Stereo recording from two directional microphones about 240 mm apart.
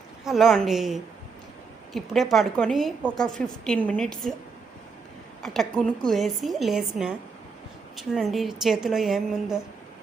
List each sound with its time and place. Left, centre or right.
0.3 s a woman's voice: centre
5.4 s a woman's voice: centre